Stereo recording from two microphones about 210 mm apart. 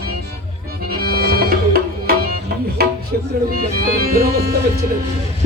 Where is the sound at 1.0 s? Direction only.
45° right (ahead or behind).